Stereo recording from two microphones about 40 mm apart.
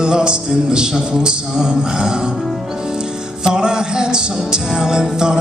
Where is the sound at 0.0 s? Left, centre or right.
Centre.